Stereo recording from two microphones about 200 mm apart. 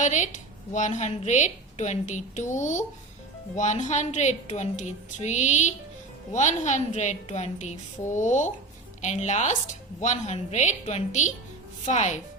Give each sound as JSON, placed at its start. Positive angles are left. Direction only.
{"t": 0.0, "sound": "a woman's voice", "side_deg": 35}